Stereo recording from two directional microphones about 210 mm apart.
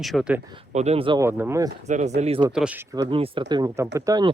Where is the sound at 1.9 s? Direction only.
35° right (ahead or behind).